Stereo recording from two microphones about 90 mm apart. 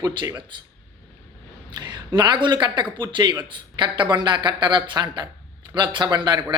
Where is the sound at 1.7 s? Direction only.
55° right (ahead or behind).